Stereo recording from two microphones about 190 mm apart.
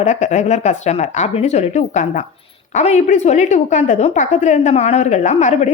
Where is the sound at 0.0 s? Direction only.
40° left (ahead or behind).